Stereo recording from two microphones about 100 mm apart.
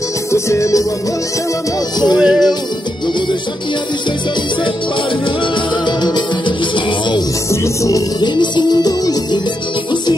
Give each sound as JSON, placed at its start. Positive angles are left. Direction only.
{"t": 0.3, "sound": "music", "side_deg": 30}
{"t": 2.1, "sound": "music", "side_deg": -5}
{"t": 5.9, "sound": "music", "side_deg": 50}
{"t": 7.6, "sound": "music", "side_deg": 30}
{"t": 8.2, "sound": "music", "side_deg": 45}